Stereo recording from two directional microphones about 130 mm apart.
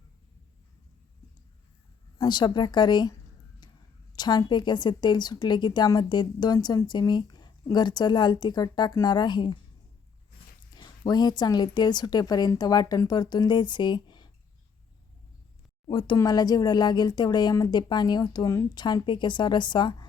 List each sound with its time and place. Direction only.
2.1 s a woman's voice: 35° left (ahead or behind)
10.7 s a woman's voice: 35° left (ahead or behind)
15.9 s a woman's voice: 35° left (ahead or behind)